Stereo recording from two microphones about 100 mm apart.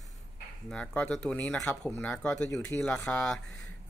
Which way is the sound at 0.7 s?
10° left (ahead or behind).